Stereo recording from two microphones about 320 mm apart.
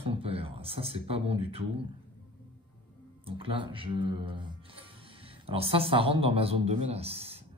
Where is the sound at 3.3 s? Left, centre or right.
Centre.